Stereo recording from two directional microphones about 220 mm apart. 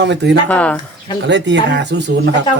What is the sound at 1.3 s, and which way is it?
Speech, 55° right (ahead or behind).